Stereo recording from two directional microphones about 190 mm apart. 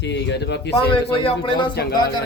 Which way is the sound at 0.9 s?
25° left (ahead or behind).